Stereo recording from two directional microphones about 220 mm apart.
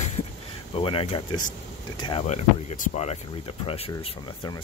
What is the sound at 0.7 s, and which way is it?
Speech, 25° left (ahead or behind).